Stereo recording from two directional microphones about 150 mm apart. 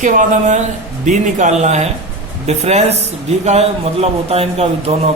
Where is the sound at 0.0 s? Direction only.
55° right (ahead or behind).